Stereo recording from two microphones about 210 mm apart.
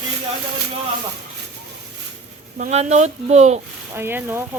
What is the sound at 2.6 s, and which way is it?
Speech, 30° right (ahead or behind).